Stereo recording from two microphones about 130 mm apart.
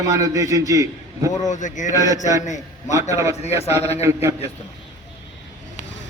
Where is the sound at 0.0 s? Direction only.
25° right (ahead or behind).